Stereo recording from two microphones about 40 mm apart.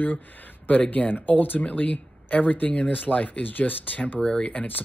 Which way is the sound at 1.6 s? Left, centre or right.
Left.